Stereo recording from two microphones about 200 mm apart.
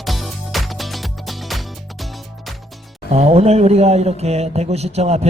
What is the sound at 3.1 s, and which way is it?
Speech, 30° right (ahead or behind).